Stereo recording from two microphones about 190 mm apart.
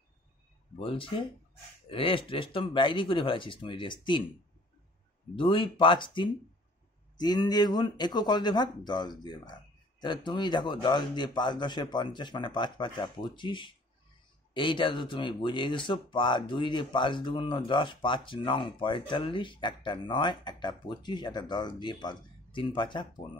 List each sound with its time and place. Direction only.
0.7 s speech: 30° left (ahead or behind)
5.3 s speech: 25° left (ahead or behind)